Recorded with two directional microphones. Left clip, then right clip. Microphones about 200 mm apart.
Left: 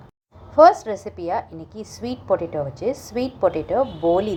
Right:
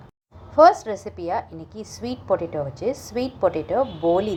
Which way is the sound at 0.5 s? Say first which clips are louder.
Left 1 dB; centre (ahead or behind).